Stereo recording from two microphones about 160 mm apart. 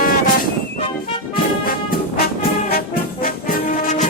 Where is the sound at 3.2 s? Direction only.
60° left (ahead or behind).